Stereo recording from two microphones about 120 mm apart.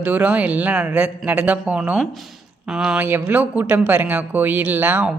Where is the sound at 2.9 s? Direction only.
15° right (ahead or behind).